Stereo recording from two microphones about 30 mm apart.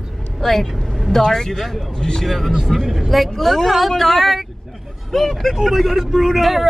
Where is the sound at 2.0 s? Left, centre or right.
Left.